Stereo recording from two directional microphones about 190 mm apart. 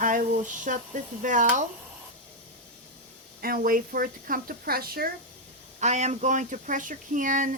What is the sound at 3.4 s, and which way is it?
Speech, 50° right (ahead or behind).